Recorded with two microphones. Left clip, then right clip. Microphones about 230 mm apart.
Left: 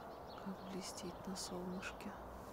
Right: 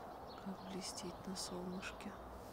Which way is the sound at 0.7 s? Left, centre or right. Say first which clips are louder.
Right 1 dB; centre.